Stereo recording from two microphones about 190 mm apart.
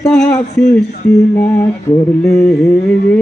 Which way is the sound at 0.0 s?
10° left (ahead or behind).